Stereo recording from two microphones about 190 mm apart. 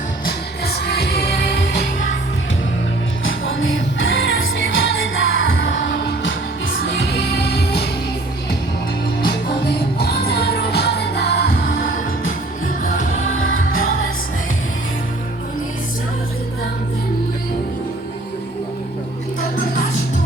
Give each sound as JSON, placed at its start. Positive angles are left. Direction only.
{"t": 0.3, "sound": "music", "side_deg": 55}
{"t": 3.2, "sound": "music", "side_deg": 90}
{"t": 7.1, "sound": "music", "side_deg": 55}
{"t": 9.6, "sound": "music", "side_deg": 55}
{"t": 13.2, "sound": "music", "side_deg": 90}